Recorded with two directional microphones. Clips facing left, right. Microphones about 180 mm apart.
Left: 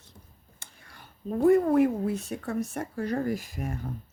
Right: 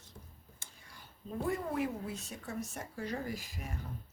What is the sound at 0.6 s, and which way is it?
Speech, 65° left (ahead or behind).